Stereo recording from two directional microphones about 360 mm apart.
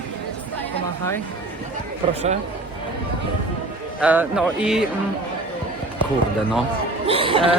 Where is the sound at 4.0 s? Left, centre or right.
Centre.